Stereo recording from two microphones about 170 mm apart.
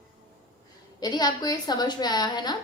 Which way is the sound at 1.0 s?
25° left (ahead or behind).